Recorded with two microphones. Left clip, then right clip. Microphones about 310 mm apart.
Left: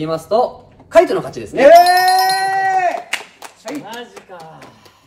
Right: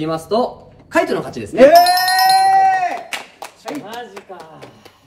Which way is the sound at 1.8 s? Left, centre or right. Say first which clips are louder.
Left 2 dB; centre.